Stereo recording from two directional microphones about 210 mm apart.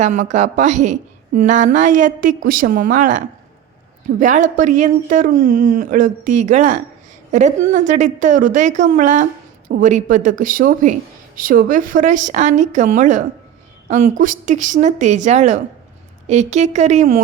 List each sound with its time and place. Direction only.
0.0 s a woman's voice: 35° right (ahead or behind)